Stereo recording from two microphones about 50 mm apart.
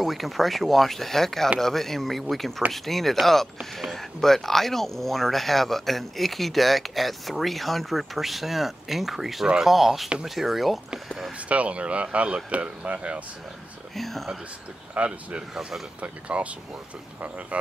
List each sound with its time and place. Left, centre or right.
0.0 s speech: centre
11.4 s speech: right
13.9 s speech: centre
15.0 s speech: right